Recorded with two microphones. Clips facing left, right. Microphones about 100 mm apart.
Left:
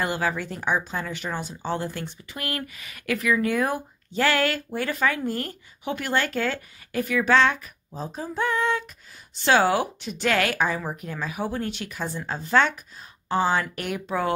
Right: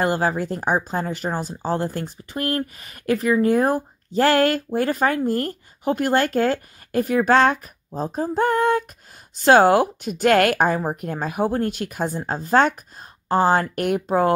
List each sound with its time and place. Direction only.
0.0 s speech: 40° right (ahead or behind)